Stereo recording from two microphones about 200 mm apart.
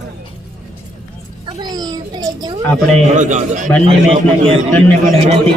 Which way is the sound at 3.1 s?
35° right (ahead or behind).